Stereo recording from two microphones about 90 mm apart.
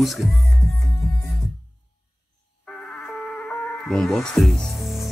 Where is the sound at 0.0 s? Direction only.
Centre (ahead or behind).